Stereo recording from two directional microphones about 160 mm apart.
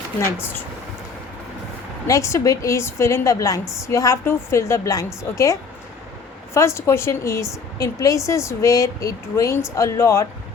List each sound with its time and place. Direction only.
0.3 s speech: 15° left (ahead or behind)
2.0 s a woman's voice: 20° left (ahead or behind)